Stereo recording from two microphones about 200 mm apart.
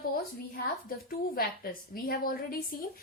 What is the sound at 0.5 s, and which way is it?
A woman's voice, 45° left (ahead or behind).